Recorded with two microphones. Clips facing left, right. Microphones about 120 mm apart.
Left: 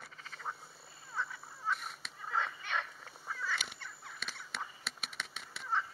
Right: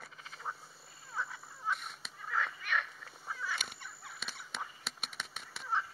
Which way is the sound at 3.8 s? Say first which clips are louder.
Even; 15° right (ahead or behind).